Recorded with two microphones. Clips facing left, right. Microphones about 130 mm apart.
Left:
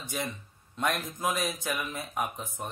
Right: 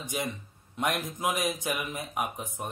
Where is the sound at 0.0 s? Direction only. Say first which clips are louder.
Right 2 dB; 15° right (ahead or behind).